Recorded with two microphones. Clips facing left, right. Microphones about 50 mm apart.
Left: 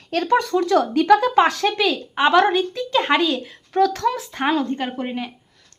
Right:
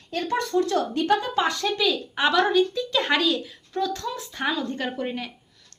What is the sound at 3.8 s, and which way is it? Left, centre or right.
Speech, left.